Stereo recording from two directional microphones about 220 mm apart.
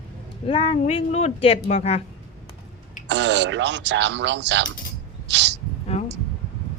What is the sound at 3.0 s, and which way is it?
Speech, 55° right (ahead or behind).